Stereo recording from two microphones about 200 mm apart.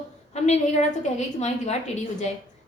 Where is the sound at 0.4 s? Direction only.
35° left (ahead or behind).